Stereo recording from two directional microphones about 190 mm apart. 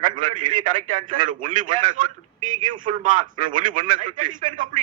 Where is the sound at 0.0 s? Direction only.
40° right (ahead or behind).